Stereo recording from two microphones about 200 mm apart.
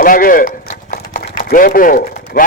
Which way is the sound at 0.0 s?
45° left (ahead or behind).